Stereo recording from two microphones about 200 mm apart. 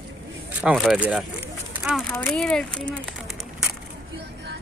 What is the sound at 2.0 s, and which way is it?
Speech, 10° left (ahead or behind).